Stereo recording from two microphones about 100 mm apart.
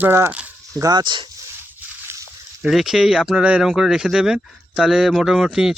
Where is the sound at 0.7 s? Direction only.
40° right (ahead or behind).